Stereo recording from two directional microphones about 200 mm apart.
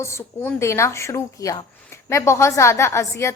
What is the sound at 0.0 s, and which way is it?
A woman's voice, 15° left (ahead or behind).